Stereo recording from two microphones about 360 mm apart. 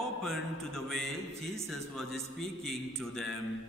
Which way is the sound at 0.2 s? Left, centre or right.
Centre.